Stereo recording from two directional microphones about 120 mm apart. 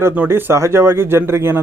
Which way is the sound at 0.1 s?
15° right (ahead or behind).